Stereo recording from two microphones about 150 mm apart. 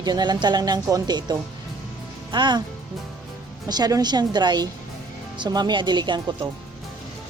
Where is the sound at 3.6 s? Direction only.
25° right (ahead or behind).